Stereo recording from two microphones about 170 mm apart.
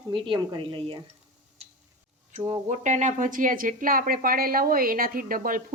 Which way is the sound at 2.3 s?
40° right (ahead or behind).